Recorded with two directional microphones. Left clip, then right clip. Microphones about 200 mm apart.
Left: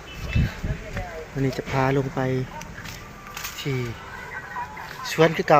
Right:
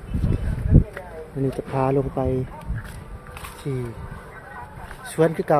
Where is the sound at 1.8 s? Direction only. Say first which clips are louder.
Right 1 dB; 35° left (ahead or behind).